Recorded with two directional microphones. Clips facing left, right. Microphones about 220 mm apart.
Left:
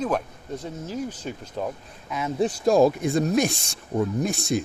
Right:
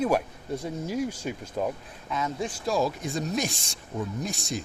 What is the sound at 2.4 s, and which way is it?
Speech, 45° left (ahead or behind).